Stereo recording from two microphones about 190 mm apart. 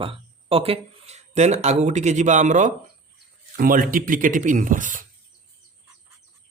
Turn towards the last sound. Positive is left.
turn(degrees=-45)  # may be behind; listen again after turning